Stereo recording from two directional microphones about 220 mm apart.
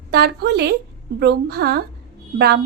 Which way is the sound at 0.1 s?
45° right (ahead or behind).